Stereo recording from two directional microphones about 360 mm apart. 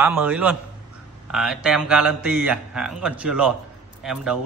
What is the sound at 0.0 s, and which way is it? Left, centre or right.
A man's voice, centre.